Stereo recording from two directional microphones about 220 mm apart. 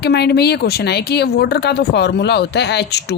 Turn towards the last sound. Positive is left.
turn(degrees=50)  # may be behind; listen again after turning